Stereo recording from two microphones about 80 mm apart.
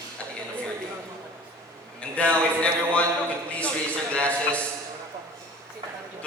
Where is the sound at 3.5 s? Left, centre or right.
Centre.